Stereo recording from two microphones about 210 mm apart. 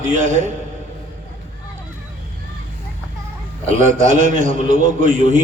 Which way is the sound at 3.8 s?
35° right (ahead or behind).